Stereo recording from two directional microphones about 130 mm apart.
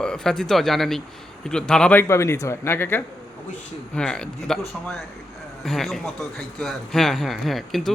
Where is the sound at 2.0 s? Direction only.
20° left (ahead or behind).